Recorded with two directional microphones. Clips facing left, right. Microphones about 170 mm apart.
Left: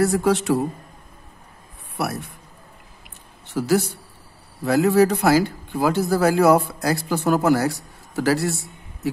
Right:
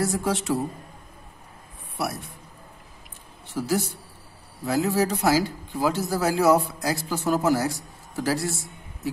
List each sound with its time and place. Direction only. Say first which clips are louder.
0.0 s a man's voice: left 7 dB; 65° left (ahead or behind)
2.0 s a man's voice: left 3 dB; 60° left (ahead or behind)
3.5 s a man's voice: left 5 dB; 70° left (ahead or behind)